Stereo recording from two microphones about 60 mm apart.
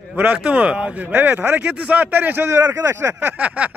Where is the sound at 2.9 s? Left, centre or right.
Right.